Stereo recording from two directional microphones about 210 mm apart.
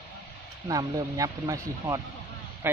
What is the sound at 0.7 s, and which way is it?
Speech, 15° right (ahead or behind).